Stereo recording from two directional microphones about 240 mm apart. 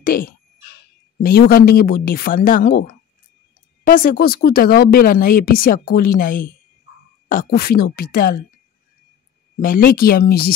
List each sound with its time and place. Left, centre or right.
0.0 s speech: left
9.6 s speech: left